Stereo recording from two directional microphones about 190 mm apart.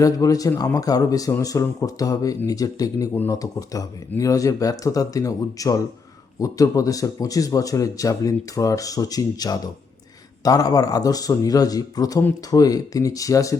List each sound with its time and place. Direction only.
0.0 s a man's voice: 20° left (ahead or behind)